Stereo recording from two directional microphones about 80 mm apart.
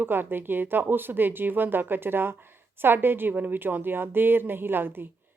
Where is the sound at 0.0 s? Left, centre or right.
Right.